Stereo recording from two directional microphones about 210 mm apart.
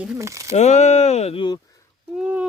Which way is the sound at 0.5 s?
30° left (ahead or behind).